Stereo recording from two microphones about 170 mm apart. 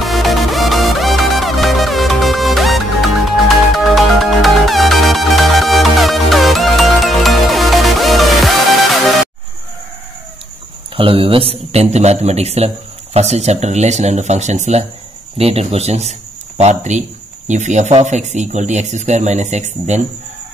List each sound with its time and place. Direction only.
0.0 s music: centre (ahead or behind)
11.0 s a man's voice: 30° right (ahead or behind)